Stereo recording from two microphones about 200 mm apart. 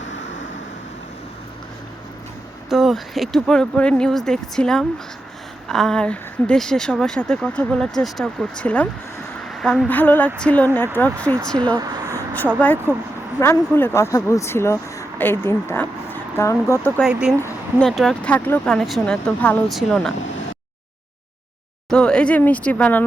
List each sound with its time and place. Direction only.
2.6 s a woman's voice: centre (ahead or behind)
9.4 s a sound: centre (ahead or behind)
10.0 s speech: 10° left (ahead or behind)
11.5 s speech: 20° right (ahead or behind)
12.1 s a sound: 10° left (ahead or behind)
12.5 s speech: 10° left (ahead or behind)
17.0 s a woman's voice: 5° right (ahead or behind)
21.8 s speech: 5° left (ahead or behind)